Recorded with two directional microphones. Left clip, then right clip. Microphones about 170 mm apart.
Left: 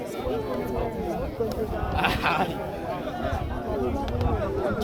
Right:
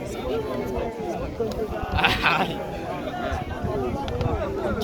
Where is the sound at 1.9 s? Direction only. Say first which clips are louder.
Right 4 dB; 55° left (ahead or behind).